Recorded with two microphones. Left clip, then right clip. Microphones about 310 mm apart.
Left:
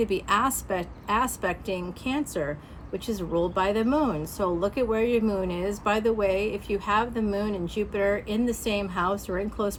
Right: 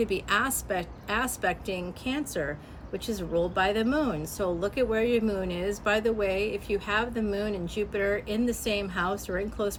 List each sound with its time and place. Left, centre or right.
0.0 s speech: centre